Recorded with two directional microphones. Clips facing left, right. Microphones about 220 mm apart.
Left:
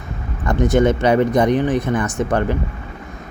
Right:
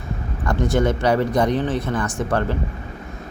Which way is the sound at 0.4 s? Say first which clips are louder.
Left 4 dB; 20° left (ahead or behind).